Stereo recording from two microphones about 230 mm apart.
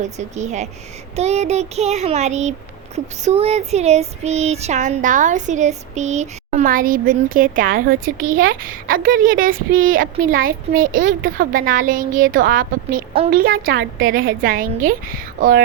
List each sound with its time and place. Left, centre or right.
0.0 s a child's voice: right